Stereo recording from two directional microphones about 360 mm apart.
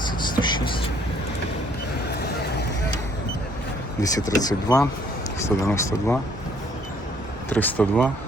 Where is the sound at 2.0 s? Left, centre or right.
Left.